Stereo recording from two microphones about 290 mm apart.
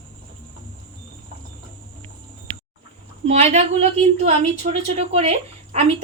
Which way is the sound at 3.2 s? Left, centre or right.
Right.